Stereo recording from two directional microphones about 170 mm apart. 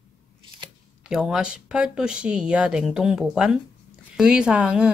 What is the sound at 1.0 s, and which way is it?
Speech, 5° right (ahead or behind).